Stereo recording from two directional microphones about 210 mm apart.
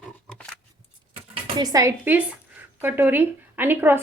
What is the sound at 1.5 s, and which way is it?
A woman's voice, 15° right (ahead or behind).